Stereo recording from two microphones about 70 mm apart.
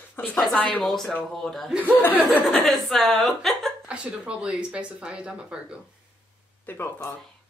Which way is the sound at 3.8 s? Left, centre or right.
Centre.